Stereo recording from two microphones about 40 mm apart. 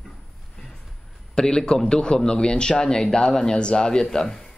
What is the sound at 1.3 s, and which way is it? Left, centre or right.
A man's voice, centre.